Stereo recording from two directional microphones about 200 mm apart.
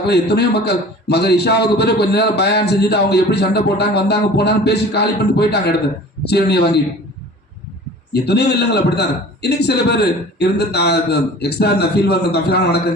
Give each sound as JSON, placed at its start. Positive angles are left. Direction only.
{"t": 0.0, "sound": "a man's voice", "side_deg": 55}
{"t": 8.1, "sound": "a man's voice", "side_deg": 55}